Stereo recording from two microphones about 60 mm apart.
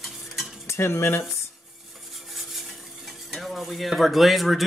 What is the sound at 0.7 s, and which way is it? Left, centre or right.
Cutlery, left.